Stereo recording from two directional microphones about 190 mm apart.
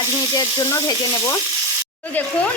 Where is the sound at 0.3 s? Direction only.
15° left (ahead or behind).